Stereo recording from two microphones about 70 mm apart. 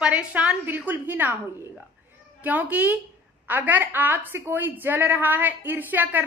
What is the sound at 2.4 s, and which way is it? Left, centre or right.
A woman's voice, right.